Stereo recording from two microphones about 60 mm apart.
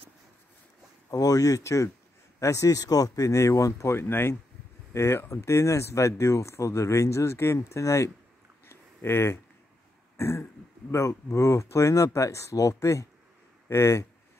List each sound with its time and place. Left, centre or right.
1.1 s speech: left
3.9 s speech: left
4.9 s speech: left
8.6 s a sound: left
10.1 s throat clearing: left
10.9 s speech: left